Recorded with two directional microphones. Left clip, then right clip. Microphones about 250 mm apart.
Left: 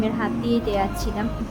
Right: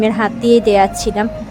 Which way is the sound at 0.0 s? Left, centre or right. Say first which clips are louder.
Right 10 dB; right.